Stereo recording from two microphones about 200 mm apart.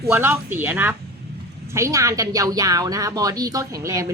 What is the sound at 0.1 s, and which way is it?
A woman's voice, 10° right (ahead or behind).